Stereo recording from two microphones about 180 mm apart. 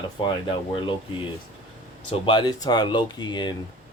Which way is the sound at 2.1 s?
25° left (ahead or behind).